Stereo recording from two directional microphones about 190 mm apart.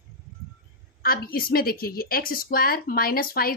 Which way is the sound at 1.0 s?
50° left (ahead or behind).